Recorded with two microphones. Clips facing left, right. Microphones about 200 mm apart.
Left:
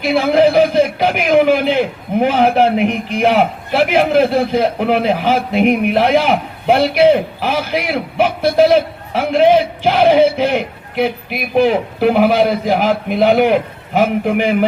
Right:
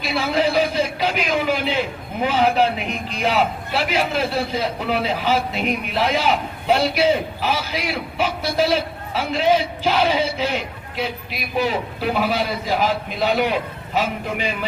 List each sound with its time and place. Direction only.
0.0 s a man's voice: 55° left (ahead or behind)